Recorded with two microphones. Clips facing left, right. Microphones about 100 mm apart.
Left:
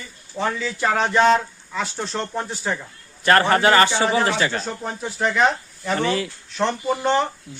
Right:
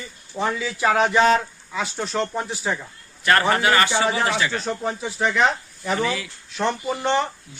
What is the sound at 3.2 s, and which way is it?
Speech, 35° left (ahead or behind).